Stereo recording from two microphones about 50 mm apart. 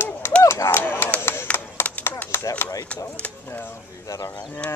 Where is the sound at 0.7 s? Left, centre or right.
Left.